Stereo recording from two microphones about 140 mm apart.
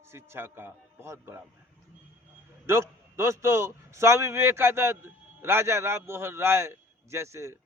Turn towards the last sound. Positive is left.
turn(degrees=-20)  # may be behind; listen again after turning